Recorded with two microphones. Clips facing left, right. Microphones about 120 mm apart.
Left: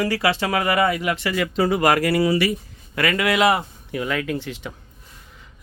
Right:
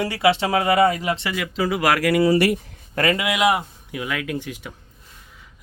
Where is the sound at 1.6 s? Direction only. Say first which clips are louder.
Left 2 dB; 40° left (ahead or behind).